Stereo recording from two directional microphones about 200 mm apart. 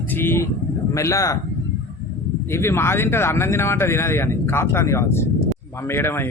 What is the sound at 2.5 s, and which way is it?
Speech, 15° left (ahead or behind).